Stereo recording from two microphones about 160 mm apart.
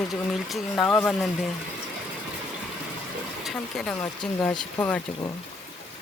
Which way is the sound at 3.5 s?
5° left (ahead or behind).